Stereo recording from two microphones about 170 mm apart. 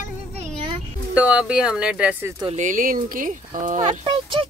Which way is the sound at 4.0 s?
30° right (ahead or behind).